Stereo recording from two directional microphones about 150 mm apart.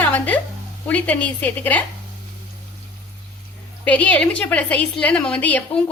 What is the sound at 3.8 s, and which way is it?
A woman's voice, 10° left (ahead or behind).